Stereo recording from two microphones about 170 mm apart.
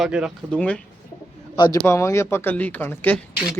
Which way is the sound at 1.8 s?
15° left (ahead or behind).